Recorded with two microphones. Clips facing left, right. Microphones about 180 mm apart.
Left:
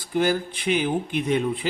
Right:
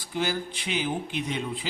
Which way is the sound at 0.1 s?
50° left (ahead or behind).